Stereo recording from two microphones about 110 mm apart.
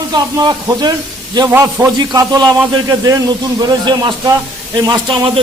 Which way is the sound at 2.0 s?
35° right (ahead or behind).